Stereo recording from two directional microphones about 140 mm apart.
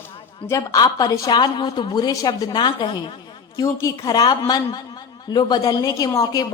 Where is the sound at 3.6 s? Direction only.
25° left (ahead or behind).